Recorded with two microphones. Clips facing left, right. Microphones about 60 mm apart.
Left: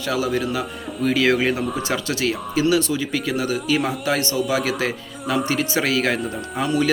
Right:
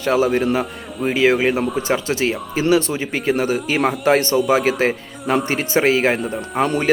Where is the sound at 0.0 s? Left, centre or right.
Right.